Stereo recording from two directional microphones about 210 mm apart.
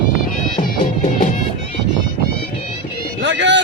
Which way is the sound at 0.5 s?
35° left (ahead or behind).